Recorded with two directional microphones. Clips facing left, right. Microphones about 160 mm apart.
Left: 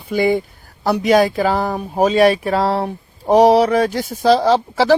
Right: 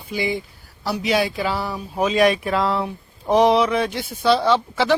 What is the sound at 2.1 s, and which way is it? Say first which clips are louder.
Speech: left 3 dB; 35° left (ahead or behind).